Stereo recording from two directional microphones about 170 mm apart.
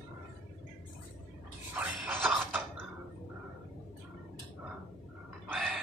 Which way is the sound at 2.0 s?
10° right (ahead or behind).